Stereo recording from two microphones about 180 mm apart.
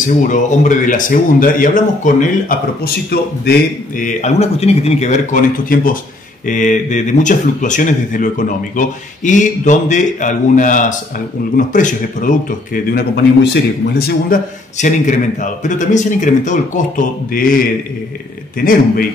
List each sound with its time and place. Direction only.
0.1 s speech: 45° left (ahead or behind); by 14.4 s 60° left (ahead or behind)
14.8 s a man's voice: 40° left (ahead or behind)